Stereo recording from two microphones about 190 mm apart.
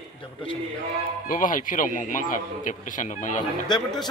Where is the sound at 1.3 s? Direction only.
45° left (ahead or behind).